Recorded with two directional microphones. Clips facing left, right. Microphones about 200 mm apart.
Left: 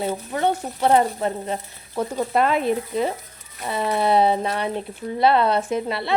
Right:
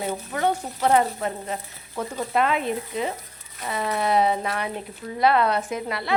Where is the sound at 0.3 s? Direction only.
30° left (ahead or behind).